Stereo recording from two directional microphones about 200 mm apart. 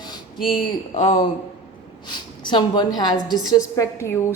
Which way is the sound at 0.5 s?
25° left (ahead or behind).